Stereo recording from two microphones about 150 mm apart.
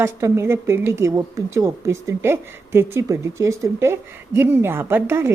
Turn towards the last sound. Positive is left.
turn(degrees=-15)  # may be behind; listen again after turning